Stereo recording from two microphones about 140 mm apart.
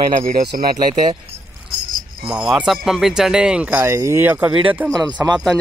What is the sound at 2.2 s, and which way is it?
Speech, 5° right (ahead or behind).